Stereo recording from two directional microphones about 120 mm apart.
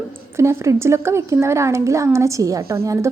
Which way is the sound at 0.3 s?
25° right (ahead or behind).